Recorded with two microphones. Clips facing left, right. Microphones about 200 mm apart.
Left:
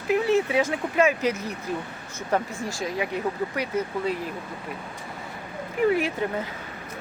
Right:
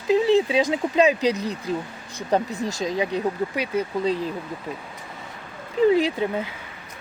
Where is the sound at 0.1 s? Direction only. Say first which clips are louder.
Right 3 dB; 20° right (ahead or behind).